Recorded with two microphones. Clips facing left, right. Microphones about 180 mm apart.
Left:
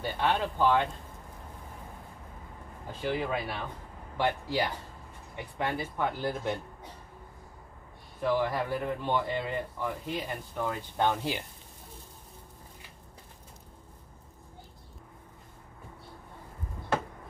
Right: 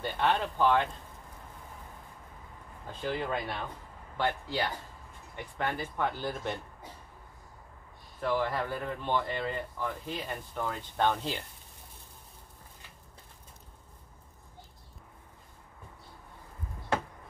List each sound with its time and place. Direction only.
0.0 s speech: 10° left (ahead or behind)
3.0 s speech: 5° left (ahead or behind)
8.2 s speech: 10° left (ahead or behind)